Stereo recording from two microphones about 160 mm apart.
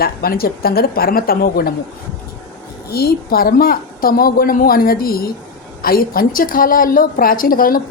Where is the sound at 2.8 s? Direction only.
75° left (ahead or behind).